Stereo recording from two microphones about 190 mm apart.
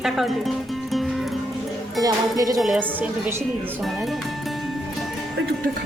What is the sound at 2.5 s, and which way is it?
A woman's voice, centre (ahead or behind).